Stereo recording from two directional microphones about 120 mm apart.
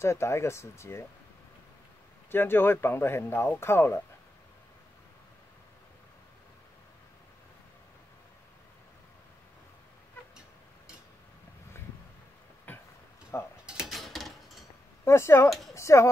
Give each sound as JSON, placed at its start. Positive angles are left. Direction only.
{"t": 0.0, "sound": "speech", "side_deg": 25}
{"t": 2.3, "sound": "speech", "side_deg": 20}
{"t": 12.7, "sound": "a sound", "side_deg": 15}
{"t": 13.7, "sound": "dishes", "side_deg": -5}
{"t": 15.0, "sound": "speech", "side_deg": 20}
{"t": 15.7, "sound": "a sound", "side_deg": 25}